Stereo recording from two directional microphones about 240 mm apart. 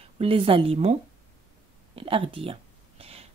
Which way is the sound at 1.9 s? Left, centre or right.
Right.